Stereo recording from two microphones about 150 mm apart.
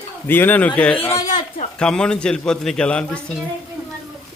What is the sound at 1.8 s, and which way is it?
A man's voice, 5° left (ahead or behind).